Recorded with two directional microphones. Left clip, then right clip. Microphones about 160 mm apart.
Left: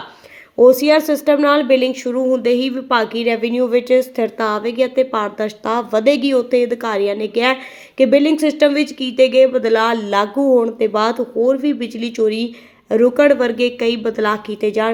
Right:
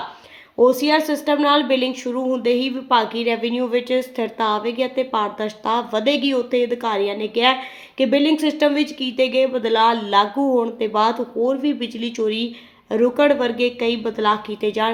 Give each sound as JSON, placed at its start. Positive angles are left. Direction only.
{"t": 0.5, "sound": "a woman's voice", "side_deg": 25}